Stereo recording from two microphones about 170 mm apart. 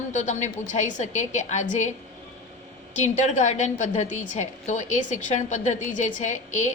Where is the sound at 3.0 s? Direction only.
45° left (ahead or behind).